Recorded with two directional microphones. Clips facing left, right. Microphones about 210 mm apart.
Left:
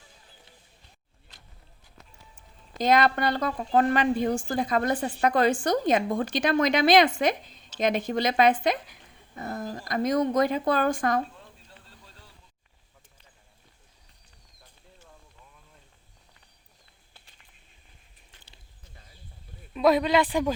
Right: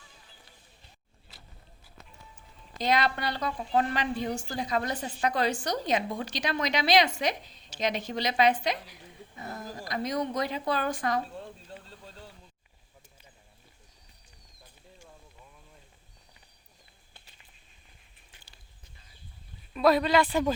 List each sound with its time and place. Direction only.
2.7 s a woman's voice: 50° left (ahead or behind)
19.7 s a man's voice: 20° left (ahead or behind)